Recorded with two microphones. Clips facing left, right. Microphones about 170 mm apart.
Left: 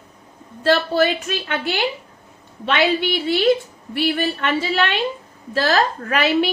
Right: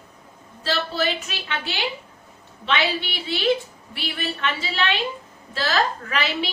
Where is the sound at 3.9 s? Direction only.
50° left (ahead or behind).